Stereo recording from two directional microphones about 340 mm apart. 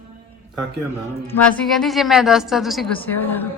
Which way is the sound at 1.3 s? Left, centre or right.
Centre.